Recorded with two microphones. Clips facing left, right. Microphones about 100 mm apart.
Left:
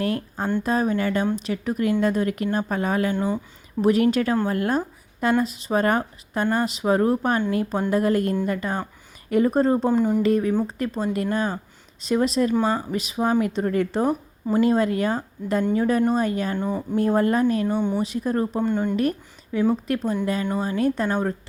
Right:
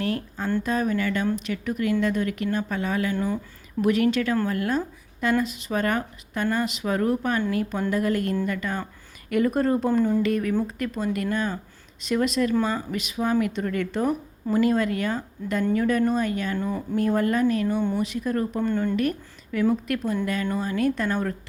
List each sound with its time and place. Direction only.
0.0 s a sound: 40° left (ahead or behind)
0.6 s speech: 35° left (ahead or behind)
3.1 s speech: 20° left (ahead or behind)
3.8 s speech: 35° left (ahead or behind)
10.0 s speech: 15° left (ahead or behind)
10.2 s speech: 35° left (ahead or behind)
16.6 s speech: 20° left (ahead or behind)
17.0 s speech: 35° left (ahead or behind)
18.6 s speech: 20° left (ahead or behind)
19.9 s speech: 30° left (ahead or behind)